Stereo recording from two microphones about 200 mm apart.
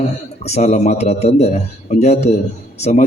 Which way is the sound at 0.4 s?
35° left (ahead or behind).